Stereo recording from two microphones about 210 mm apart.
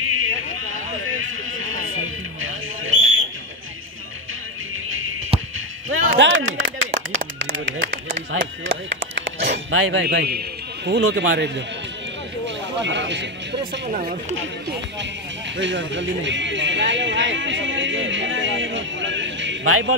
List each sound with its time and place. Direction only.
1.0 s a sound: 70° right (ahead or behind)
4.8 s music: 75° right (ahead or behind)
5.9 s a sound: 70° right (ahead or behind)
8.3 s speech: 60° right (ahead or behind)
12.4 s music: 60° right (ahead or behind)
15.5 s speech: 60° right (ahead or behind); by 20.0 s 90° right